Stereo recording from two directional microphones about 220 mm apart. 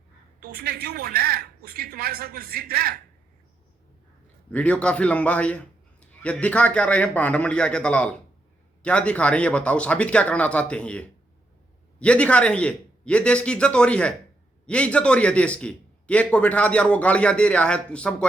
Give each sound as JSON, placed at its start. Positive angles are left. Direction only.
{"t": 0.3, "sound": "a woman's voice", "side_deg": -45}
{"t": 4.5, "sound": "a man's voice", "side_deg": 5}